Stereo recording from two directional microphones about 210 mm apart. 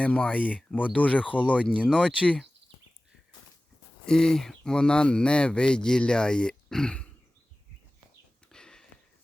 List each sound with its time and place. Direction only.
0.0 s speech: 5° left (ahead or behind)
4.0 s speech: 5° left (ahead or behind)
8.5 s a sound: 5° left (ahead or behind)